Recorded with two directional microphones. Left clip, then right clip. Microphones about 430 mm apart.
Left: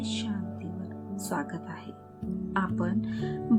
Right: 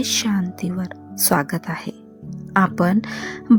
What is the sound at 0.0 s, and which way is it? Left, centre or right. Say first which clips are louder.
Speech: right 13 dB; right.